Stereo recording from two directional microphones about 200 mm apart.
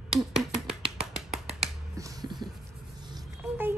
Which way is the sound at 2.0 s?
20° right (ahead or behind).